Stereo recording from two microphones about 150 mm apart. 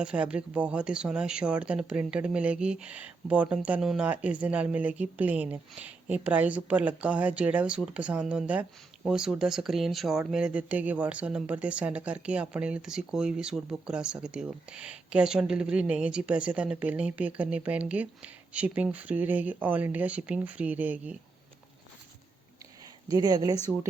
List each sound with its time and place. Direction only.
0.0 s speech: 5° right (ahead or behind)
23.0 s speech: 25° right (ahead or behind)